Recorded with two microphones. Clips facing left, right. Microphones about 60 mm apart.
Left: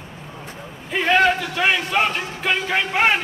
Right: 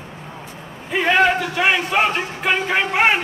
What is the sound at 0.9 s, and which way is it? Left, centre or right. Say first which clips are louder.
Speech: right 1 dB; centre.